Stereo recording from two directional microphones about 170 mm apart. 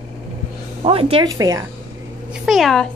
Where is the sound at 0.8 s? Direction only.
35° right (ahead or behind).